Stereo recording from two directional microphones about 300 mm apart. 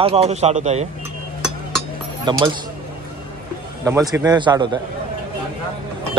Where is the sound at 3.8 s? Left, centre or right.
Centre.